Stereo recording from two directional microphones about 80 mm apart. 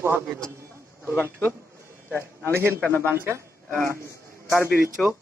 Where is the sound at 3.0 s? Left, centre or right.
Right.